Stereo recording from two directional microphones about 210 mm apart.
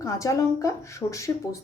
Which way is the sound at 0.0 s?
15° left (ahead or behind).